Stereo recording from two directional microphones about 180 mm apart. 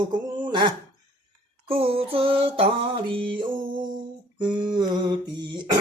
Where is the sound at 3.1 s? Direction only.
30° right (ahead or behind).